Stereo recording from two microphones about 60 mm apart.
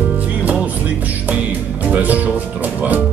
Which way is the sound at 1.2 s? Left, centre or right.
Right.